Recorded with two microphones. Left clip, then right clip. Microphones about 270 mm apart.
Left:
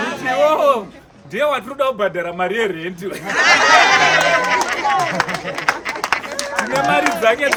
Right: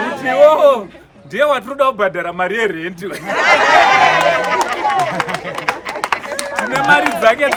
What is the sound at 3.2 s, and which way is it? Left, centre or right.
Run, right.